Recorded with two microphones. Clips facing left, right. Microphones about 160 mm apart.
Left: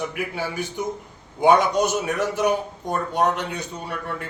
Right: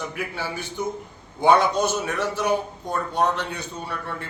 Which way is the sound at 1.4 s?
15° left (ahead or behind).